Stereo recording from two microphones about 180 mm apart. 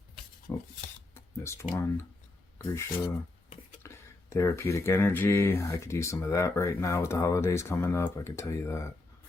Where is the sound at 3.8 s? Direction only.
15° left (ahead or behind).